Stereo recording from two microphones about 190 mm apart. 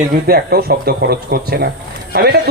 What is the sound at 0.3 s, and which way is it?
Speech, 55° right (ahead or behind).